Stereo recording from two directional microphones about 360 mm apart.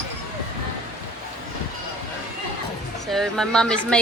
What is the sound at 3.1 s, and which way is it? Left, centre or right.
Speech, centre.